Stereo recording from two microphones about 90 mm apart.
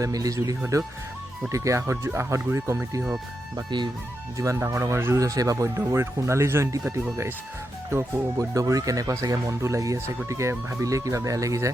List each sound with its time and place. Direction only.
0.0 s speech: 40° right (ahead or behind)
4.4 s speech: 30° right (ahead or behind)
5.2 s speech: 40° right (ahead or behind)